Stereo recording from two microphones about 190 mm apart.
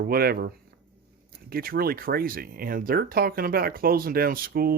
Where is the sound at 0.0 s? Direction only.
50° right (ahead or behind).